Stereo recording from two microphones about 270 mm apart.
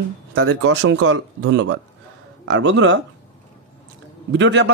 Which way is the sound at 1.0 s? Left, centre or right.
Right.